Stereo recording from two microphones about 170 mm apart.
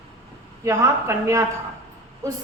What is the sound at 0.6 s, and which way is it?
A woman's voice, 15° right (ahead or behind).